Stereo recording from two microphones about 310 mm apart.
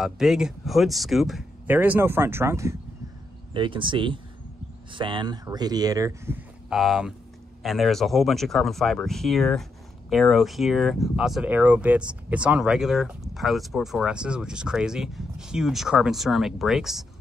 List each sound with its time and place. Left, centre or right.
0.0 s speech: centre